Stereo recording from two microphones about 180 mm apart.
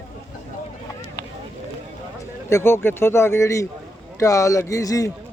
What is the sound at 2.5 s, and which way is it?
Speech, 15° left (ahead or behind).